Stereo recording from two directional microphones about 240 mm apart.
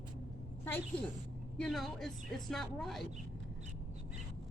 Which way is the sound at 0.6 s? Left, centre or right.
Centre.